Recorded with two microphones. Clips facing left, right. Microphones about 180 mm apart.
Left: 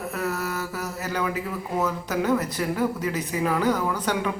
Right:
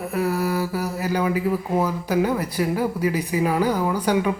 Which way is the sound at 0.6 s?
30° right (ahead or behind).